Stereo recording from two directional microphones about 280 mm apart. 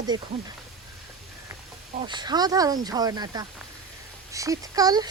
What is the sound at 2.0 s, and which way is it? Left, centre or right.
Speech, centre.